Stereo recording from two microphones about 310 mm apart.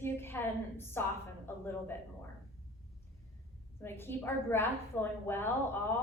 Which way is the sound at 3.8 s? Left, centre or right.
Centre.